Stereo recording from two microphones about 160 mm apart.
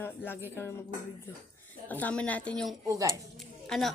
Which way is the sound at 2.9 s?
20° right (ahead or behind).